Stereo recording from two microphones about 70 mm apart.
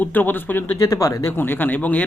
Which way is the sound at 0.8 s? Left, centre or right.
Left.